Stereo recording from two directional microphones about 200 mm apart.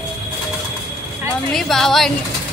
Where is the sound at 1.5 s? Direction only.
Centre (ahead or behind).